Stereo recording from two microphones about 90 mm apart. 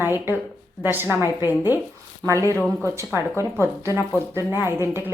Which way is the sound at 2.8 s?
35° right (ahead or behind).